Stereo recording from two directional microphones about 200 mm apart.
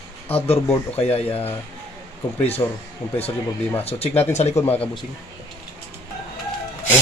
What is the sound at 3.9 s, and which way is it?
Speech, 30° left (ahead or behind).